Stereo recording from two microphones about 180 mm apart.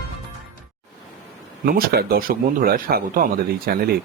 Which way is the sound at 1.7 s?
55° right (ahead or behind).